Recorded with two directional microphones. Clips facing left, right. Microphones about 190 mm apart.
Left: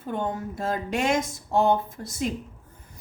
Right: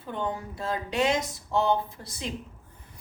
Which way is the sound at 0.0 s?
50° left (ahead or behind).